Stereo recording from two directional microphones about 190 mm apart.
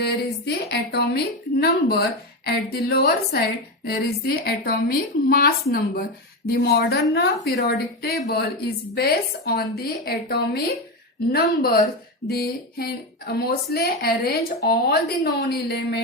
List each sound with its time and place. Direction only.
0.0 s a woman's voice: 60° left (ahead or behind)